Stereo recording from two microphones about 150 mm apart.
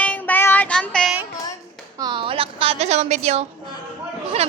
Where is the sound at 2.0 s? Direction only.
30° right (ahead or behind); by 3.4 s 45° right (ahead or behind).